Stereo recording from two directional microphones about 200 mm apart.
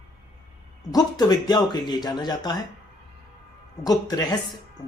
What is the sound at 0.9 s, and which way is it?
Speech, 20° left (ahead or behind).